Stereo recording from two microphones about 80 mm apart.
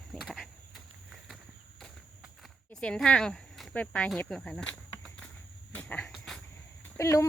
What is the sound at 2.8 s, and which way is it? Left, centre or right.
Speech, centre.